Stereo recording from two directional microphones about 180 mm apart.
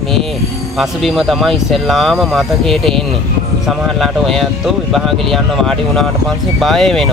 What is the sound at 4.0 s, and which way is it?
A man's voice, centre (ahead or behind).